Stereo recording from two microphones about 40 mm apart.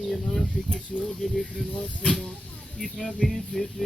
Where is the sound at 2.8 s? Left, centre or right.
Centre.